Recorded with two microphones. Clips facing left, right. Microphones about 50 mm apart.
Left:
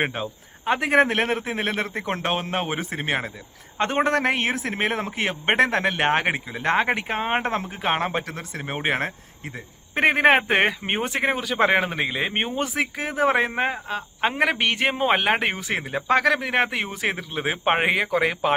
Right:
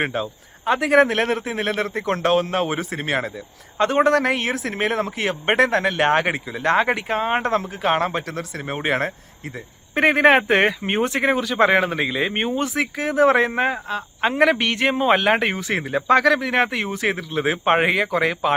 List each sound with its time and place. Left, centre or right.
0.0 s speech: left